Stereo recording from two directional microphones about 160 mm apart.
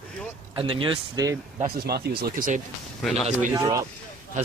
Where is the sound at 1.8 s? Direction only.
80° right; by 2.6 s 60° right (ahead or behind).